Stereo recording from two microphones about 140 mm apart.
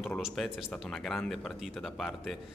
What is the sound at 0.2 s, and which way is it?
Speech, 5° right (ahead or behind).